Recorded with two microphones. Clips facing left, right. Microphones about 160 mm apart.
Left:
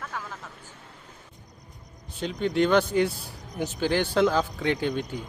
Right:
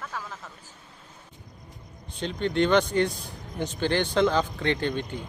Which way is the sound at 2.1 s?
5° left (ahead or behind).